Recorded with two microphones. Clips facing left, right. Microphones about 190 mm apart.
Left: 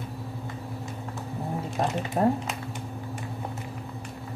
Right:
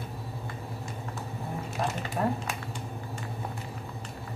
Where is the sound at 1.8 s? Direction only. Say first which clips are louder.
Left 5 dB; 45° left (ahead or behind).